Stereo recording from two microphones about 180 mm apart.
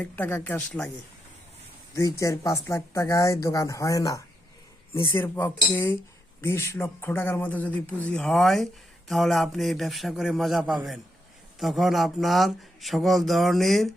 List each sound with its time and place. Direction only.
0.0 s speech: 10° left (ahead or behind)
2.0 s speech: 15° left (ahead or behind); by 13.9 s centre (ahead or behind)